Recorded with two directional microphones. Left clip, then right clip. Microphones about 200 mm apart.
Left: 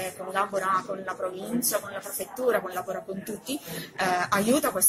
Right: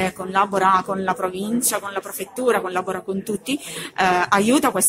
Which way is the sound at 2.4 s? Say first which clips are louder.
Right 6 dB; 55° right (ahead or behind).